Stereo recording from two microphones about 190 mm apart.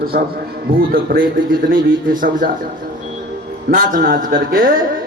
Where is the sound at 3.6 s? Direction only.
50° right (ahead or behind).